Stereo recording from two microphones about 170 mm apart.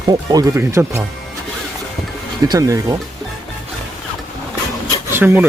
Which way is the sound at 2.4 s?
20° right (ahead or behind).